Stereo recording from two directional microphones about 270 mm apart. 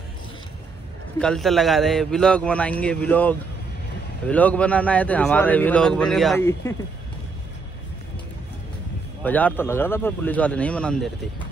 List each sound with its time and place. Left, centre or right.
1.2 s speech: centre
9.2 s speech: centre